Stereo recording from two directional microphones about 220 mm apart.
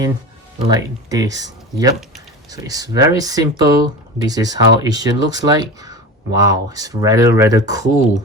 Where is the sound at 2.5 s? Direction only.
15° right (ahead or behind).